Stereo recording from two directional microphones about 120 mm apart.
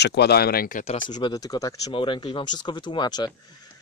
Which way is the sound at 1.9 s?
45° left (ahead or behind).